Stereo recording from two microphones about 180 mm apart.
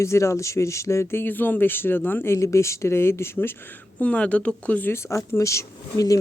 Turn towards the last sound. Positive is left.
turn(degrees=20)  # may be behind; listen again after turning